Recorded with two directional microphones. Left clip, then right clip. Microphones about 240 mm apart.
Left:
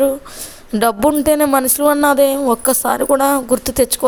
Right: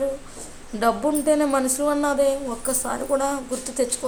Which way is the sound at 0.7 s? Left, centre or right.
Left.